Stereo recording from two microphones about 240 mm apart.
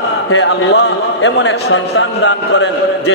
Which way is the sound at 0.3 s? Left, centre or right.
Left.